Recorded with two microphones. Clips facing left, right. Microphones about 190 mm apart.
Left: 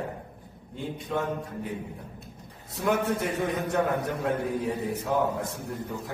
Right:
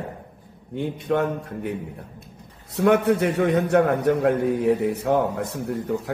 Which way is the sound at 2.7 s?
70° right (ahead or behind).